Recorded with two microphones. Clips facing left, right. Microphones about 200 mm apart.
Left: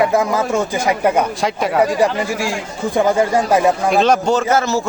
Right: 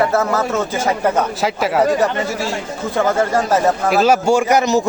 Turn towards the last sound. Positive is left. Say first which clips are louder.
# right 2 dB
turn(degrees=-20)  # may be behind; listen again after turning